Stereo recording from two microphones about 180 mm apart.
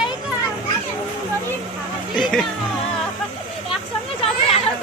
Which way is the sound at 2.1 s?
Centre (ahead or behind).